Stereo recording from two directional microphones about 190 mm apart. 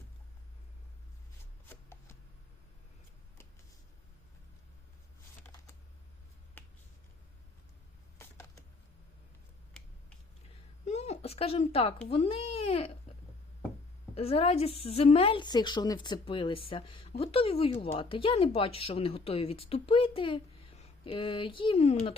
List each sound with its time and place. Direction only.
6.6 s finger snapping: 10° left (ahead or behind)
10.8 s speech: 35° left (ahead or behind)
14.2 s speech: 30° left (ahead or behind)